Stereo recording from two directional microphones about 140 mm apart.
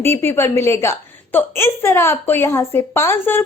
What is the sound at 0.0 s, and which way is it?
A woman's voice, 15° left (ahead or behind).